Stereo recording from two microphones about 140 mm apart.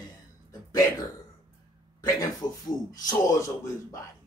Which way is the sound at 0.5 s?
25° left (ahead or behind).